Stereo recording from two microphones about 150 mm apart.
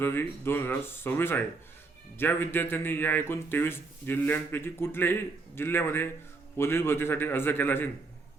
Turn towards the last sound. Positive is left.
turn(degrees=15)  # may be behind; listen again after turning